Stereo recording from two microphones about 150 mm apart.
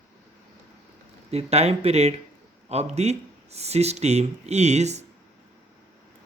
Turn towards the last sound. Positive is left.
turn(degrees=-50)  # may be behind; listen again after turning